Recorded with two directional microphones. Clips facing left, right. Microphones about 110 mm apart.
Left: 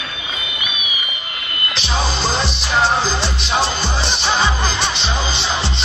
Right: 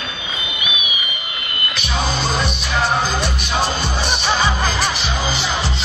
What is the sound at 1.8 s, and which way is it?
Music, 30° left (ahead or behind).